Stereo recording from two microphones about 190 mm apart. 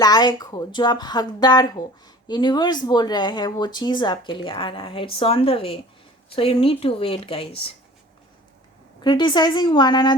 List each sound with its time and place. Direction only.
0.0 s speech: 20° left (ahead or behind)
9.0 s speech: 25° left (ahead or behind)